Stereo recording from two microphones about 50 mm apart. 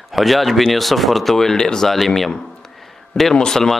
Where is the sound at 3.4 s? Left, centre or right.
Centre.